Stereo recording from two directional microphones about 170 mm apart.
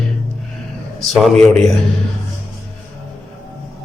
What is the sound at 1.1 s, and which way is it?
Speech, centre (ahead or behind).